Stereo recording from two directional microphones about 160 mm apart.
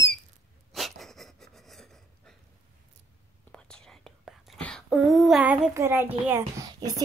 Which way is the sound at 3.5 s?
5° left (ahead or behind).